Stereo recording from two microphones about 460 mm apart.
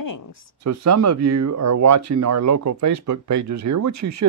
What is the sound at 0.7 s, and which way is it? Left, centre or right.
Speech, right.